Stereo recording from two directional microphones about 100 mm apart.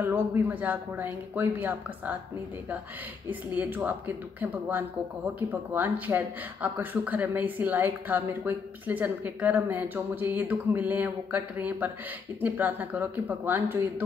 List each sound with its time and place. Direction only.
0.0 s speech: 20° right (ahead or behind)
3.3 s speech: 20° right (ahead or behind)